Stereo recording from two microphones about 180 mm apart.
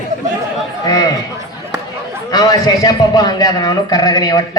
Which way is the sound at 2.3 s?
20° left (ahead or behind).